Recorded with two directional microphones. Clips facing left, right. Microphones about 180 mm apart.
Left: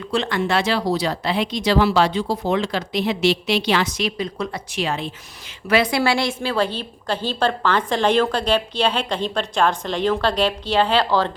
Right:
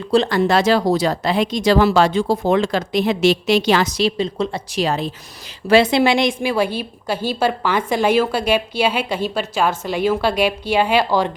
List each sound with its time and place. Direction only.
0.1 s speech: 35° right (ahead or behind)
5.6 s a woman's voice: 25° right (ahead or behind)